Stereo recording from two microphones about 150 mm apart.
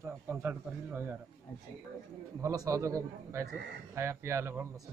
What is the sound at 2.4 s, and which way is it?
A man's voice, 20° right (ahead or behind).